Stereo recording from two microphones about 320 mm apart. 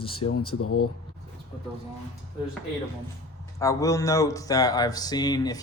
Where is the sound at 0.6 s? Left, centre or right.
Left.